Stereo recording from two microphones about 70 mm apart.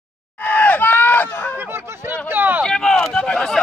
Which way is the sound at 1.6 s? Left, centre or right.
Right.